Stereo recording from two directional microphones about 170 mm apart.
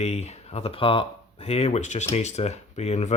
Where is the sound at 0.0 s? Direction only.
40° left (ahead or behind).